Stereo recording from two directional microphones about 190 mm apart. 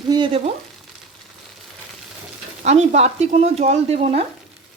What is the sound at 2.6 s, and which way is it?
A woman's voice, 35° right (ahead or behind).